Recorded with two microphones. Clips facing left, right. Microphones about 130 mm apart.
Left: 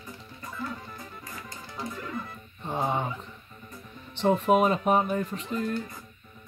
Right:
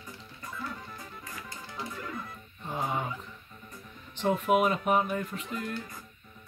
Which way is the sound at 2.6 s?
30° left (ahead or behind).